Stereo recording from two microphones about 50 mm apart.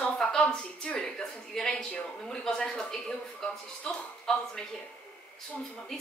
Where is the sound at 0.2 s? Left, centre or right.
Centre.